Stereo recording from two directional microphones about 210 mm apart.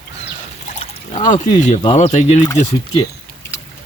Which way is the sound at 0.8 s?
35° left (ahead or behind).